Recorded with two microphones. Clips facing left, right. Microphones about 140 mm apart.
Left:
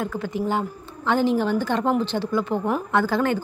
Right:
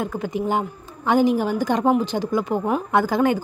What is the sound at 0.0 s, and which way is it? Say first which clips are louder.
A woman's voice: right 1 dB; 20° right (ahead or behind).